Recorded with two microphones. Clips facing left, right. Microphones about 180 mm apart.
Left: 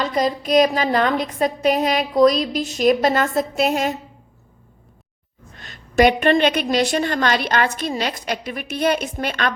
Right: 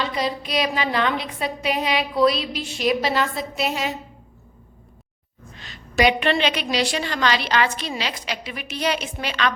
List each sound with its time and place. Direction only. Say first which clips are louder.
0.0 s a woman's voice: left 4 dB; 45° left (ahead or behind)
5.5 s a woman's voice: left 5 dB; 50° left (ahead or behind)